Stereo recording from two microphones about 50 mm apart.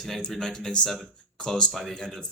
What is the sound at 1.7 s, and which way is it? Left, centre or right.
Speech, centre.